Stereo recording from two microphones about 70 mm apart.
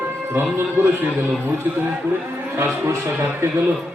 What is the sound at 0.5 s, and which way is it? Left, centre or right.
A man's voice, right.